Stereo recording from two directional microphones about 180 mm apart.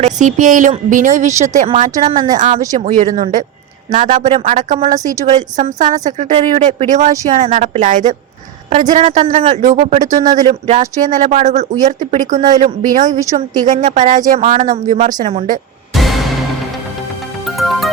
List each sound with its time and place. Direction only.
0.0 s a woman's voice: 45° right (ahead or behind)
2.0 s speech: 25° right (ahead or behind)
2.7 s a woman's voice: 45° right (ahead or behind)
16.0 s music: centre (ahead or behind)
17.4 s music: centre (ahead or behind)